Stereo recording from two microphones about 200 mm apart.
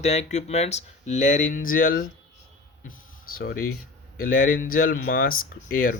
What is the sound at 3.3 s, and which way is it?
Speech, 45° left (ahead or behind).